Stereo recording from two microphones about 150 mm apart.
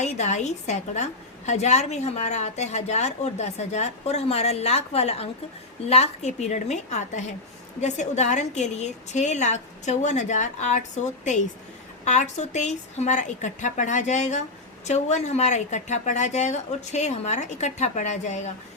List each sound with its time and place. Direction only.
0.0 s a woman's voice: 50° left (ahead or behind)